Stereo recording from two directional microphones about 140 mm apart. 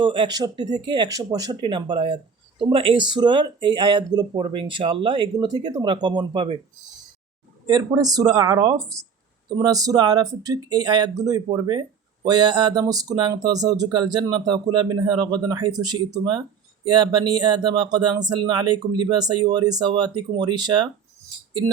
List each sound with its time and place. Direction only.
0.0 s speech: 35° right (ahead or behind)
7.7 s speech: 30° right (ahead or behind)